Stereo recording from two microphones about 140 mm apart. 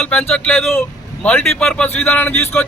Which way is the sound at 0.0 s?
10° left (ahead or behind).